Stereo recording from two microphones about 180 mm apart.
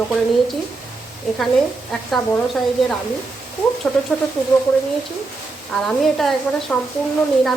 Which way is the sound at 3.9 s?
5° left (ahead or behind).